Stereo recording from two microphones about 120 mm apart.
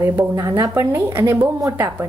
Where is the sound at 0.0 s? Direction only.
20° right (ahead or behind).